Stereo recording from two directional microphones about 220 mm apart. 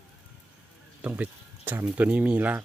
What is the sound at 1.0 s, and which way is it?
Speech, 5° right (ahead or behind).